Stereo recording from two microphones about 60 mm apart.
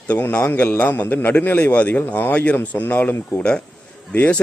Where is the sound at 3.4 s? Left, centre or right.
Centre.